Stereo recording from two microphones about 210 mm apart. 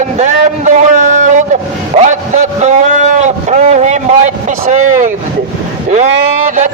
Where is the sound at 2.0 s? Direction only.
35° right (ahead or behind).